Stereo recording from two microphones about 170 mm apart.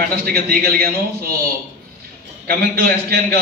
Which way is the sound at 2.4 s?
60° right (ahead or behind).